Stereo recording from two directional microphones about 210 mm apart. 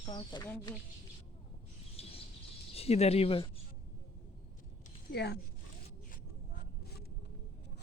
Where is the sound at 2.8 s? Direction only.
30° left (ahead or behind).